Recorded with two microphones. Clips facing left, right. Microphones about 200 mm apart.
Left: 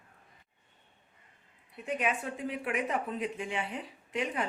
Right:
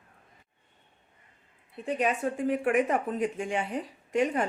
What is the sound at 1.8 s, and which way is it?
Speech, 35° right (ahead or behind).